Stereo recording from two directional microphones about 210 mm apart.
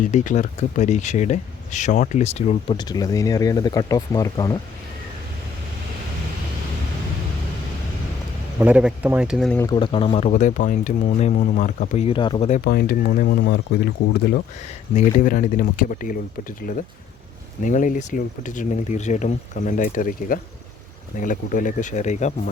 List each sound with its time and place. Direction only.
0.0 s speech: 35° left (ahead or behind)
2.7 s speech: 20° left (ahead or behind)
8.5 s speech: 5° right (ahead or behind)
9.6 s speech: 20° left (ahead or behind)
12.5 s speech: 40° left (ahead or behind)
14.9 s speech: 40° left (ahead or behind)